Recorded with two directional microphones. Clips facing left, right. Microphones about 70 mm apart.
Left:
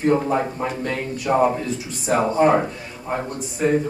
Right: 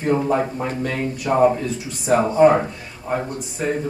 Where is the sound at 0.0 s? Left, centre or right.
Centre.